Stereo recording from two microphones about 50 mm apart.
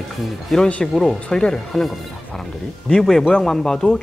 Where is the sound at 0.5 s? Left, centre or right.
Centre.